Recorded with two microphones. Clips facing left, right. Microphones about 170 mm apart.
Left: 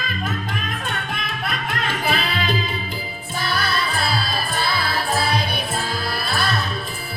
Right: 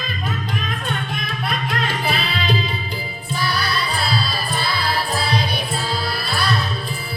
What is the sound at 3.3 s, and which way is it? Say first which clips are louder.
Music: right 1 dB; 50° left (ahead or behind).